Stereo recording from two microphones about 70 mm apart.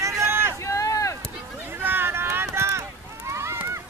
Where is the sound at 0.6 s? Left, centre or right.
Left.